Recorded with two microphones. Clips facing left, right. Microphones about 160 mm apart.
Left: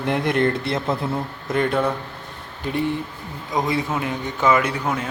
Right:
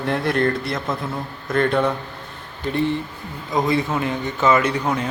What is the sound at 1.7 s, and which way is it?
Speech, 5° left (ahead or behind).